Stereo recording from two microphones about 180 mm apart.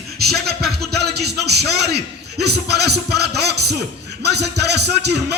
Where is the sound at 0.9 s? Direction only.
65° right (ahead or behind).